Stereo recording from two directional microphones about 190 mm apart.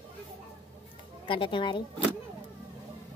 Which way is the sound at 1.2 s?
25° left (ahead or behind).